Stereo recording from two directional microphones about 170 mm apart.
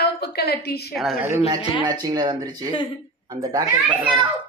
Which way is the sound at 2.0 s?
25° right (ahead or behind).